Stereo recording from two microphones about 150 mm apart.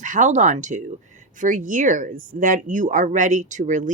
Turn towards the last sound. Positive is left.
turn(degrees=-55)  # may be behind; listen again after turning